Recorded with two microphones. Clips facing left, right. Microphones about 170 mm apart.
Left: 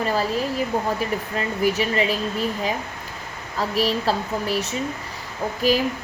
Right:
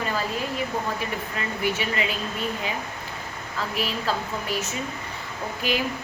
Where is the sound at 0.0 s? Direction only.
40° left (ahead or behind).